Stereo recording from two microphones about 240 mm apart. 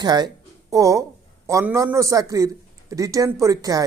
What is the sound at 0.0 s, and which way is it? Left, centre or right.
A man's voice, centre.